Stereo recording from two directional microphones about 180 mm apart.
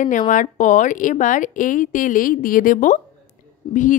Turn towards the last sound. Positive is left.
turn(degrees=45)  # may be behind; listen again after turning